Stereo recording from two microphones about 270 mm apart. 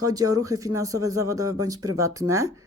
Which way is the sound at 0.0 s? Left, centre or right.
Centre.